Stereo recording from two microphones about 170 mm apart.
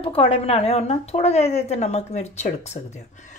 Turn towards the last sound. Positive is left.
turn(degrees=45)  # may be behind; listen again after turning